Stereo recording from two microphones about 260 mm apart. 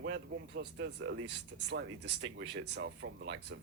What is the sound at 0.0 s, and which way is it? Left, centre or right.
Speech, right.